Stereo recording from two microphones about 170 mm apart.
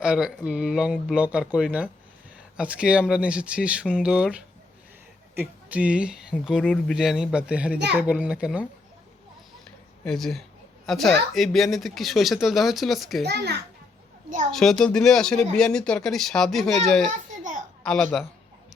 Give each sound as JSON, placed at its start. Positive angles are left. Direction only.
{"t": 0.0, "sound": "speech", "side_deg": -5}
{"t": 10.0, "sound": "a woman's voice", "side_deg": 0}
{"t": 13.2, "sound": "a child's voice", "side_deg": -75}
{"t": 14.5, "sound": "speech", "side_deg": 0}
{"t": 17.1, "sound": "a sound", "side_deg": -45}
{"t": 17.8, "sound": "speech", "side_deg": 5}